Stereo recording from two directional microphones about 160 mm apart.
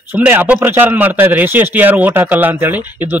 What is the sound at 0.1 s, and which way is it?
Speech, 10° right (ahead or behind).